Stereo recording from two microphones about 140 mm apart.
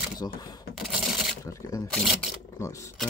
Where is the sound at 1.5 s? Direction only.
25° left (ahead or behind).